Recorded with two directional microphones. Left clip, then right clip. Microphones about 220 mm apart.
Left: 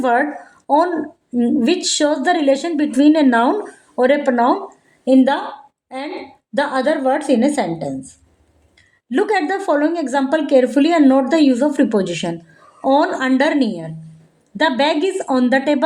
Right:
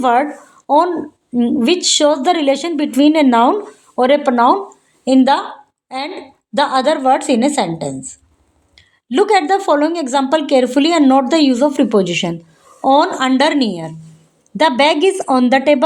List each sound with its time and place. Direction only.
0.0 s a woman's voice: 25° right (ahead or behind)